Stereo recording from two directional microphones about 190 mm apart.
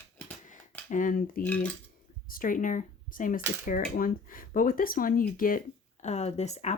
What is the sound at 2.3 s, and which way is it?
Speech, 45° left (ahead or behind).